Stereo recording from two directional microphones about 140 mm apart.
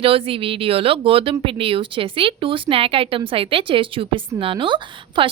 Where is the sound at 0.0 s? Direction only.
40° right (ahead or behind).